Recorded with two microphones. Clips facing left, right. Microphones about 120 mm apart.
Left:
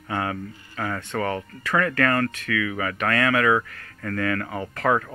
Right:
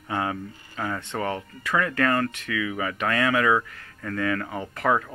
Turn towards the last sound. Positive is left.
turn(degrees=-15)  # may be behind; listen again after turning